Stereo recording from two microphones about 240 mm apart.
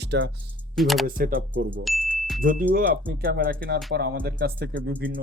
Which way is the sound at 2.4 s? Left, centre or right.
Right.